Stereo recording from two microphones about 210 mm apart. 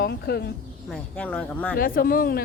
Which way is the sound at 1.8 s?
45° left (ahead or behind).